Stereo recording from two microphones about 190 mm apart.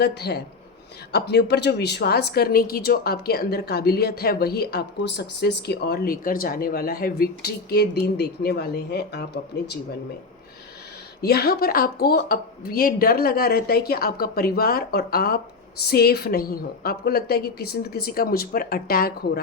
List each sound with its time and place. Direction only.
0.0 s speech: 60° left (ahead or behind)
11.2 s speech: 55° left (ahead or behind)